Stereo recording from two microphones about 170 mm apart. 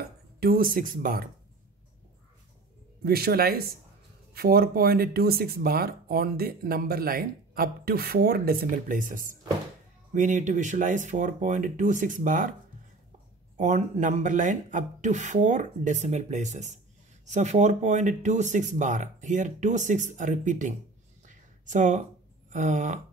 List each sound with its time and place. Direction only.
0.0 s speech: 60° right (ahead or behind)
3.0 s speech: 65° right (ahead or behind)
13.6 s speech: 45° right (ahead or behind)
21.3 s a sound: 45° right (ahead or behind)
22.5 s speech: 45° right (ahead or behind)